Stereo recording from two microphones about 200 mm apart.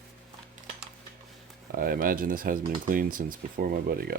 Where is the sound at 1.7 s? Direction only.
45° right (ahead or behind).